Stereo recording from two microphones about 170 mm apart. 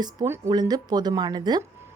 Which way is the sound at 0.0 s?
20° right (ahead or behind).